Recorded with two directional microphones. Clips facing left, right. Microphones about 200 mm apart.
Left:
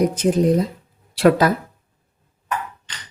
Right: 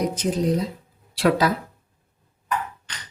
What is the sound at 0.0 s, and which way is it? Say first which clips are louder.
A woman's voice: left 6 dB; 50° left (ahead or behind).